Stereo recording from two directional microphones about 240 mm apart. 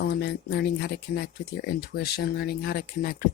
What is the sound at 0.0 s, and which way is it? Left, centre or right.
Speech, left.